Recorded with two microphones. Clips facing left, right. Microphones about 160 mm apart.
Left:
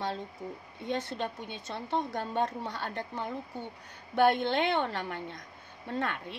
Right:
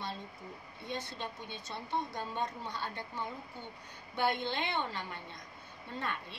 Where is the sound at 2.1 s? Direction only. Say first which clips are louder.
Left 6 dB; 60° left (ahead or behind).